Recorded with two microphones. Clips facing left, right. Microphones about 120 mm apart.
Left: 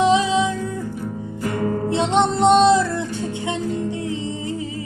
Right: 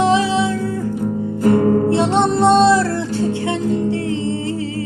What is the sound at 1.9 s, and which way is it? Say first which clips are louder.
Music: right 3 dB; 20° left (ahead or behind).